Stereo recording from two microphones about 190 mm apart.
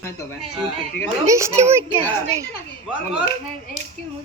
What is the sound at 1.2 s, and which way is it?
Speech, 15° right (ahead or behind).